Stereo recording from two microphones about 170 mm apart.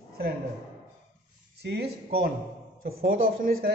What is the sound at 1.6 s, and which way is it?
A woman's voice, 70° right (ahead or behind).